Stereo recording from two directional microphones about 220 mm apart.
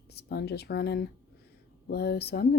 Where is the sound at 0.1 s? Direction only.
50° left (ahead or behind).